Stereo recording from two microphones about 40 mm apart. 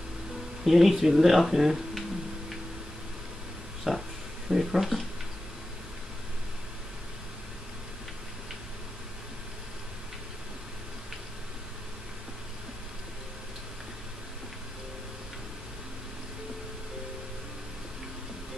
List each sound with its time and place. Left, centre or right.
0.7 s speech: centre
3.9 s a sound: centre
4.5 s speech: centre